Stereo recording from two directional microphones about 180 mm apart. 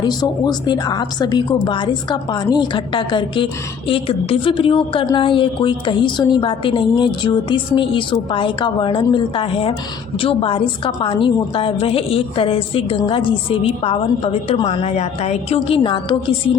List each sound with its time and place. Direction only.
0.0 s a woman's voice: 25° left (ahead or behind)